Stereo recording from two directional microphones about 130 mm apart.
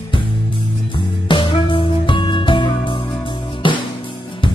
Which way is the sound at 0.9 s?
40° left (ahead or behind).